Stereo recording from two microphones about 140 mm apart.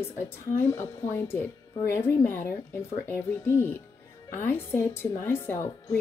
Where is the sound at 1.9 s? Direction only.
15° left (ahead or behind).